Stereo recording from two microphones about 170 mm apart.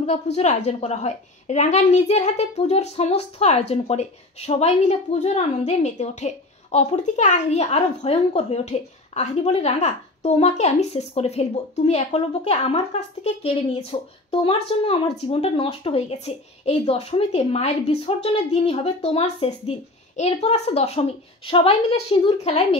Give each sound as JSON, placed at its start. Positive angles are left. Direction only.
{"t": 0.0, "sound": "a woman's voice", "side_deg": 40}